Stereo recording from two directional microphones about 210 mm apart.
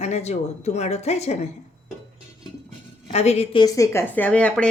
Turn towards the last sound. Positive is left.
turn(degrees=5)  # may be behind; listen again after turning